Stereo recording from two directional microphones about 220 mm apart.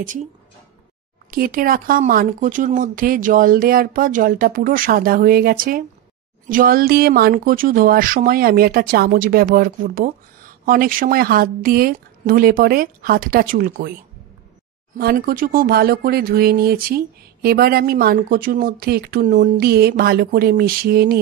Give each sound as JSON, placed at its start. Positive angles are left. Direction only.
{"t": 1.3, "sound": "speech", "side_deg": -40}
{"t": 15.0, "sound": "speech", "side_deg": -45}